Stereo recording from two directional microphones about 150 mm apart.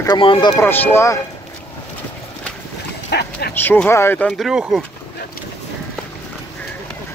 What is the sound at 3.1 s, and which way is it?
Dog, 90° left.